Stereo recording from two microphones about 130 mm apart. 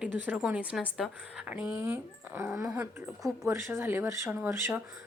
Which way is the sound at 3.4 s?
20° right (ahead or behind).